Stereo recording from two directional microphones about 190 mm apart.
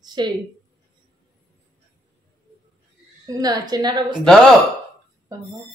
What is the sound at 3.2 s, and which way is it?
A woman's voice, 20° right (ahead or behind).